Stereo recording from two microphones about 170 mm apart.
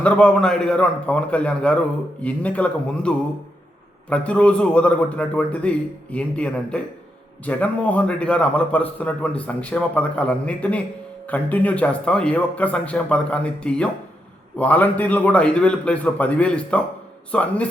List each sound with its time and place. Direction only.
0.0 s a man's voice: 5° left (ahead or behind)